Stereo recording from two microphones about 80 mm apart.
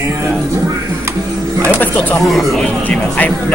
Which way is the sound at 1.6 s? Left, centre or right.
Centre.